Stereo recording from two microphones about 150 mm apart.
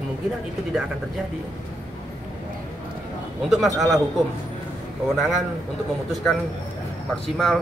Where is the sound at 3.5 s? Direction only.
Centre (ahead or behind).